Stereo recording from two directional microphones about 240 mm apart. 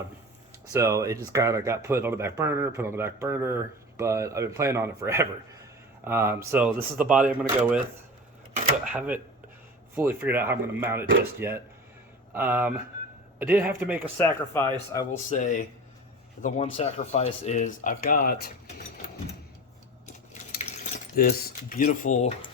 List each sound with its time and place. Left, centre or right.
0.7 s speech: centre
8.9 s speech: centre
14.2 s speech: centre
15.3 s speech: left
20.6 s keys jangling: left
21.2 s speech: left